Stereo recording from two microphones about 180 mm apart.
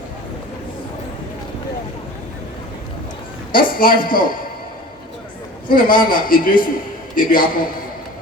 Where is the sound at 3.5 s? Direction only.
55° left (ahead or behind).